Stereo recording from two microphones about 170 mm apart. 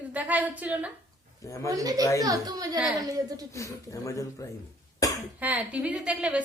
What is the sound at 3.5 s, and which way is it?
Speech, 20° left (ahead or behind).